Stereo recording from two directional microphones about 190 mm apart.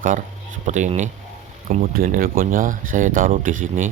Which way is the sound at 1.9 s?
50° right (ahead or behind).